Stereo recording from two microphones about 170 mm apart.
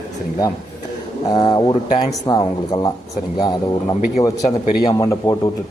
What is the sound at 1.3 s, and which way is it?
Speech, 20° left (ahead or behind).